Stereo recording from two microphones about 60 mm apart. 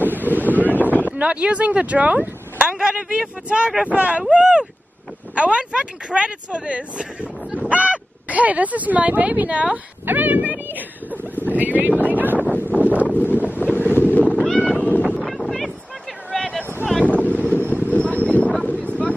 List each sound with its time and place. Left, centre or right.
0.0 s wind noise: right
1.0 s speech: right
10.0 s cat: right
11.5 s wind noise: right
12.4 s wind noise: left
14.4 s cat: centre
16.3 s a sound: centre
17.1 s wind noise: left
17.6 s a sound: right
17.9 s a sound: left
18.7 s boat: left